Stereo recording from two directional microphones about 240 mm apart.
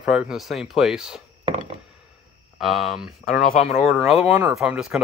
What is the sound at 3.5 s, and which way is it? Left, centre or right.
Speech, left.